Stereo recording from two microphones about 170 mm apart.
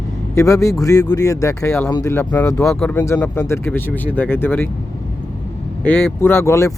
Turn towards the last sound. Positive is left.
turn(degrees=15)  # may be behind; listen again after turning